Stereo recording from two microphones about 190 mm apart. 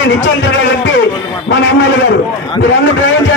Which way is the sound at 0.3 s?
75° left (ahead or behind).